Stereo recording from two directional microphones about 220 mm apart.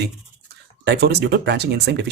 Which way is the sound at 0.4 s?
50° right (ahead or behind).